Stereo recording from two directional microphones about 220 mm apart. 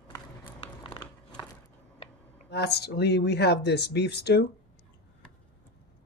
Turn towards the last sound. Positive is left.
turn(degrees=50)  # may be behind; listen again after turning